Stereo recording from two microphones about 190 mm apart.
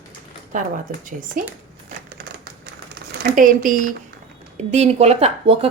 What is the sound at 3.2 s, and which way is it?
Speech, 45° right (ahead or behind).